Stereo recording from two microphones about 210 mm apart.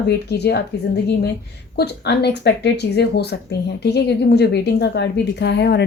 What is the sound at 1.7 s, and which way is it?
A woman's voice, 50° left (ahead or behind).